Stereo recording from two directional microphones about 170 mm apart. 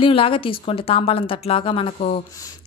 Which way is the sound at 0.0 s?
30° left (ahead or behind).